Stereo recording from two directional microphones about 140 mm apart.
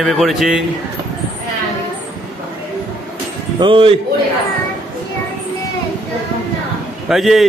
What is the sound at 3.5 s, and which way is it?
Speech, 35° right (ahead or behind).